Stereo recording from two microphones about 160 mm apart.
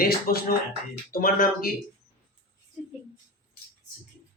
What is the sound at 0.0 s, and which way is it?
Speech, 70° left (ahead or behind).